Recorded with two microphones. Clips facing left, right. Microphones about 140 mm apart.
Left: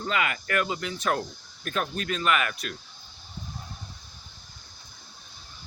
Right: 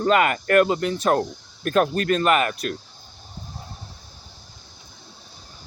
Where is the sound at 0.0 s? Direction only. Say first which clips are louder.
Right 10 dB; 50° right (ahead or behind).